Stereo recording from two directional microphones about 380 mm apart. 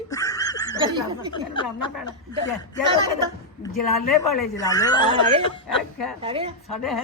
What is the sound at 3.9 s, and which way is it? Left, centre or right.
Speech, left.